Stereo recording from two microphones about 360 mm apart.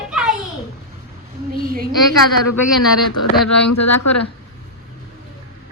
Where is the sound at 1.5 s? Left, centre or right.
Right.